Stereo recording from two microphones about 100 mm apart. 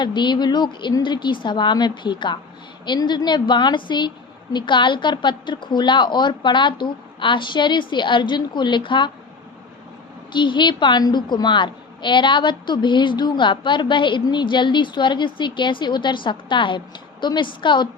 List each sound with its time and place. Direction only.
0.0 s a woman's voice: 50° left (ahead or behind)
10.3 s a woman's voice: 50° left (ahead or behind)